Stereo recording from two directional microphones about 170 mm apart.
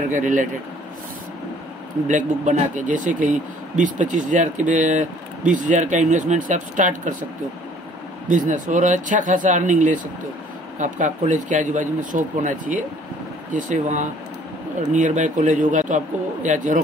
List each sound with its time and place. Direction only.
0.1 s speech: 50° right (ahead or behind)
2.0 s speech: 45° right (ahead or behind)
8.3 s speech: 50° right (ahead or behind)